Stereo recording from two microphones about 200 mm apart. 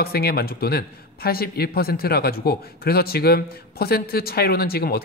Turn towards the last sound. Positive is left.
turn(degrees=50)  # may be behind; listen again after turning